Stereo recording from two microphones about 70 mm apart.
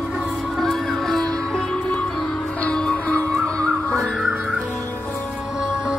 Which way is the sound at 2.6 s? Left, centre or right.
Centre.